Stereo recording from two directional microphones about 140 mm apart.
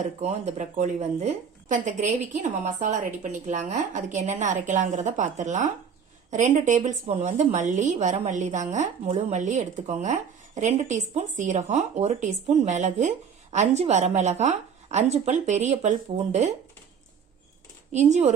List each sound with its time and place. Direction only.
0.2 s a woman's voice: 55° right (ahead or behind)
17.9 s a woman's voice: 55° right (ahead or behind)